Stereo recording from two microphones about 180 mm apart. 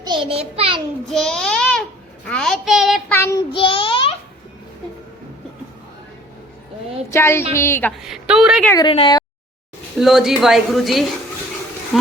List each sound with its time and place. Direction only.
0.0 s a child's voice: 25° right (ahead or behind)
1.0 s a child's voice: centre (ahead or behind)
3.1 s a woman's voice: 15° left (ahead or behind)
3.5 s child singing: 30° left (ahead or behind)
7.1 s a woman's voice: 15° left (ahead or behind)
8.0 s speech: 5° right (ahead or behind)
8.7 s speech: 25° left (ahead or behind)
10.0 s speech: centre (ahead or behind)